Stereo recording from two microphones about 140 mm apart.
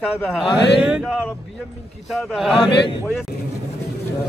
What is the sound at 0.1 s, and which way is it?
Speech, centre (ahead or behind).